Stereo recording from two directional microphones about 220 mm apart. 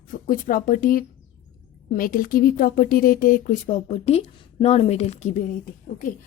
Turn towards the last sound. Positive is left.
turn(degrees=40)  # may be behind; listen again after turning